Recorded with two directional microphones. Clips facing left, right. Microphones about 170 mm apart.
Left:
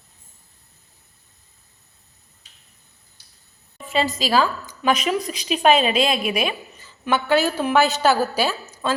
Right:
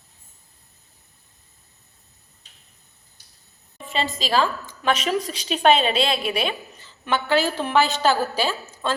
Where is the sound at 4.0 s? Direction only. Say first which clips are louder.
Left 2 dB; 5° left (ahead or behind).